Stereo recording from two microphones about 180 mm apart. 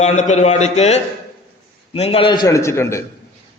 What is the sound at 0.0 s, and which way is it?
A man's voice, 40° left (ahead or behind).